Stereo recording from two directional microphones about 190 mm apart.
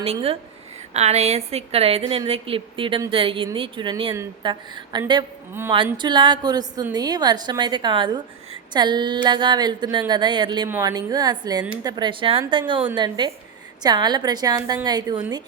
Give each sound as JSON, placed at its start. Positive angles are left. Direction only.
{"t": 0.0, "sound": "a woman's voice", "side_deg": -30}